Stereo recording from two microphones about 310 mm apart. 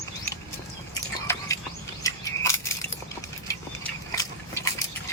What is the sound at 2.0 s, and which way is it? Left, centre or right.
Crushing, centre.